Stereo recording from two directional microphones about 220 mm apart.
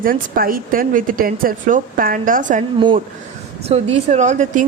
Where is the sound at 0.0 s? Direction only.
40° right (ahead or behind).